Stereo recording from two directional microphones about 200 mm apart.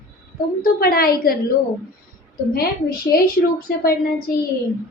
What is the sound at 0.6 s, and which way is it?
Speech, 50° left (ahead or behind).